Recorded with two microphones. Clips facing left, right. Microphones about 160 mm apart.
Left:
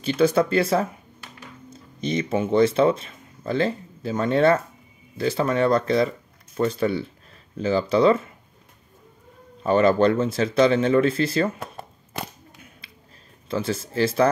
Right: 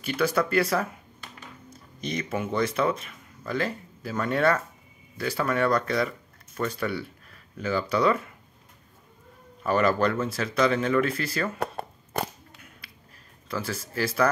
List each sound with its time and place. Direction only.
0.0 s speech: 25° left (ahead or behind)
9.6 s speech: 25° left (ahead or behind)
11.6 s a sound: 60° right (ahead or behind)
13.5 s speech: 25° left (ahead or behind)